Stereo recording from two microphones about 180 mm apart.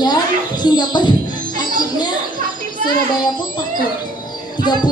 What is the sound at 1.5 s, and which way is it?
Music, 25° left (ahead or behind).